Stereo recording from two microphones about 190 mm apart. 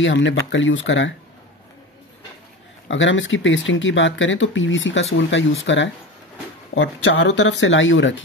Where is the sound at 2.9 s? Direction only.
80° left.